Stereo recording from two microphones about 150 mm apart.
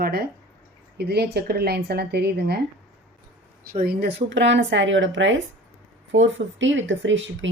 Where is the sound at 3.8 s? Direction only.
90° right.